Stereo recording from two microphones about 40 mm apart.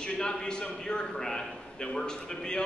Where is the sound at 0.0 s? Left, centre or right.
Centre.